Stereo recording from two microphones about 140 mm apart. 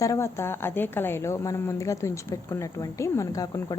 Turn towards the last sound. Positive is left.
turn(degrees=25)  # may be behind; listen again after turning